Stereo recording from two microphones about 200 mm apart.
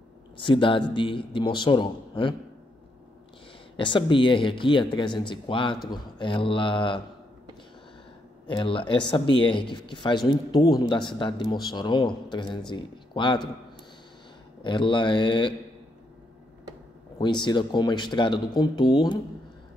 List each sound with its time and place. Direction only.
0.4 s speech: 25° left (ahead or behind)
3.7 s speech: 25° left (ahead or behind)
8.5 s speech: 25° left (ahead or behind)
14.6 s speech: 25° left (ahead or behind)
17.2 s speech: 20° left (ahead or behind)